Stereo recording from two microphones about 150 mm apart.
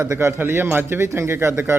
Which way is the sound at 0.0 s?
15° right (ahead or behind).